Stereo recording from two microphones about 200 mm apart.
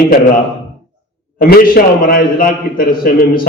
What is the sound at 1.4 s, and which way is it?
A man's voice, 45° left (ahead or behind).